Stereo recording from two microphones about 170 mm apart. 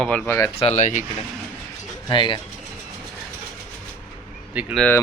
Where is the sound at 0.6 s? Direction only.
45° left (ahead or behind).